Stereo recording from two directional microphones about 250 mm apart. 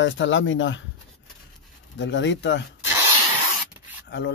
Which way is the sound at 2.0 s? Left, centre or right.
Left.